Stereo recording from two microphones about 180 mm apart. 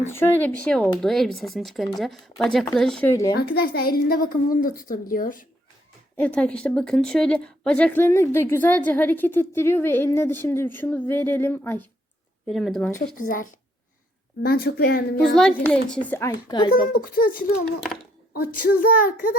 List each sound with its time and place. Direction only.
0.1 s speech: 10° left (ahead or behind)
3.1 s a woman's voice: 15° left (ahead or behind)
3.3 s a woman's voice: 60° left (ahead or behind)
6.1 s a woman's voice: 5° left (ahead or behind)
12.5 s speech: centre (ahead or behind)
13.1 s a woman's voice: 50° left (ahead or behind)
15.4 s a woman's voice: 5° left (ahead or behind)
16.5 s speech: 25° left (ahead or behind)
16.9 s a woman's voice: 50° left (ahead or behind)
18.3 s a woman's voice: 55° left (ahead or behind)